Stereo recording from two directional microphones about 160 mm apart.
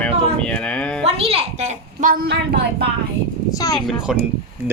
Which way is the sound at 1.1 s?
40° right (ahead or behind).